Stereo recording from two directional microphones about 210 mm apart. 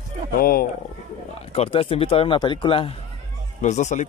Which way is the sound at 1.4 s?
30° left (ahead or behind).